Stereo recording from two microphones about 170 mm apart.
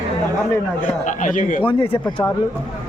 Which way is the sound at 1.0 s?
50° left (ahead or behind).